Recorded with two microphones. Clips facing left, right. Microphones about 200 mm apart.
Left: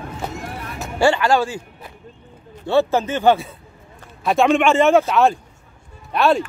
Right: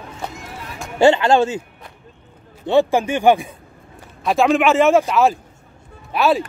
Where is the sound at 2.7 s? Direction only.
15° right (ahead or behind).